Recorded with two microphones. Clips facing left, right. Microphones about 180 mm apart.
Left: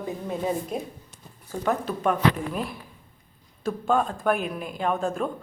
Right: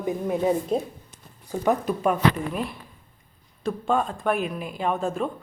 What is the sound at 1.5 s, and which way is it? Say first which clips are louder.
Speech: right 3 dB; 15° right (ahead or behind).